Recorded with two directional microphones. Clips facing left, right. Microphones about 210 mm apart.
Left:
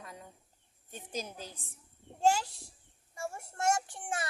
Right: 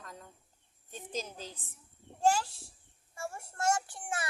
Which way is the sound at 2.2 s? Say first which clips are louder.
Even; 20° left (ahead or behind).